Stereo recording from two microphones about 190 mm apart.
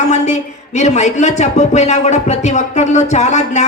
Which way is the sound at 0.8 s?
35° left (ahead or behind).